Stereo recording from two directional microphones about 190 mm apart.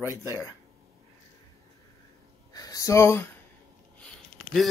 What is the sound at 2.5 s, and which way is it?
Speech, 20° left (ahead or behind).